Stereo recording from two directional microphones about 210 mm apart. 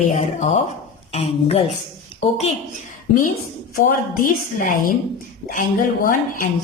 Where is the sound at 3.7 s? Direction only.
40° left (ahead or behind).